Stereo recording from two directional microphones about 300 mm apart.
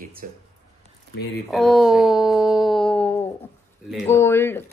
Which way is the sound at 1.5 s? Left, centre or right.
Centre.